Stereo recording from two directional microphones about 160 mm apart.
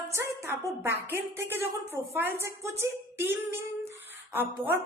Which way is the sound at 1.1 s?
15° right (ahead or behind).